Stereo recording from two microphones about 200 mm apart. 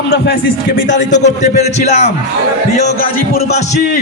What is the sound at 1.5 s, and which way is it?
Speech, 35° left (ahead or behind).